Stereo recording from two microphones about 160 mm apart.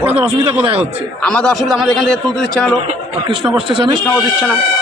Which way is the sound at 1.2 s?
5° left (ahead or behind).